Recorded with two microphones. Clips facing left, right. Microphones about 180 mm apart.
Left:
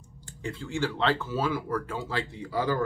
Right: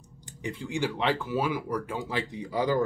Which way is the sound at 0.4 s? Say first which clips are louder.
Even; 15° right (ahead or behind).